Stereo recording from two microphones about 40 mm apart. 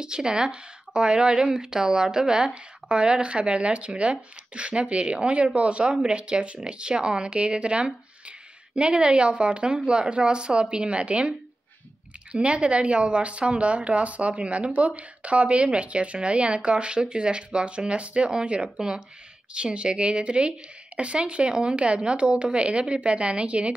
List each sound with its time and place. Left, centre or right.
0.0 s speech: centre